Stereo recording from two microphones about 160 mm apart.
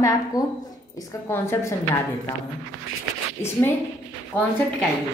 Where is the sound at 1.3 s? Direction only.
15° left (ahead or behind).